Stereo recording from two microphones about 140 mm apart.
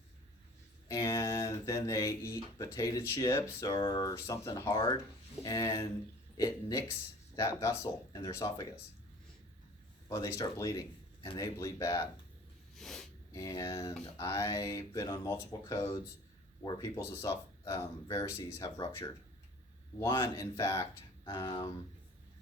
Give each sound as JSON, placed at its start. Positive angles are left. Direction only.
{"t": 0.9, "sound": "speech", "side_deg": 20}
{"t": 3.7, "sound": "speech", "side_deg": 35}
{"t": 4.0, "sound": "speech", "side_deg": 20}
{"t": 10.1, "sound": "speech", "side_deg": 20}
{"t": 12.7, "sound": "a sound", "side_deg": 0}
{"t": 13.3, "sound": "speech", "side_deg": 25}